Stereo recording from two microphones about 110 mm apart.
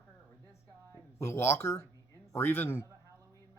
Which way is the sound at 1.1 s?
25° left (ahead or behind).